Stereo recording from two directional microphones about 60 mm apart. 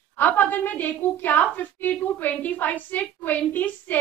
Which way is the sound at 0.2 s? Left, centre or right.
Left.